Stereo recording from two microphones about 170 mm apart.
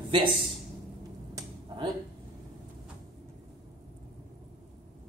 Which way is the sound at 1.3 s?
30° right (ahead or behind).